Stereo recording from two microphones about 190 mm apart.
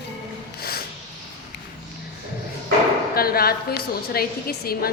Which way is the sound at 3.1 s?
50° left (ahead or behind).